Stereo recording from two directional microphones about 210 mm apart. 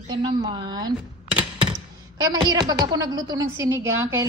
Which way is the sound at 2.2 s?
20° right (ahead or behind).